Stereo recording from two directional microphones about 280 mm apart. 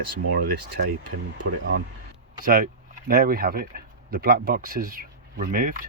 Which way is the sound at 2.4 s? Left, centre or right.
Right.